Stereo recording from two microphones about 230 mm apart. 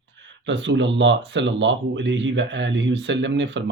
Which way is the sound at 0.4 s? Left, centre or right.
Right.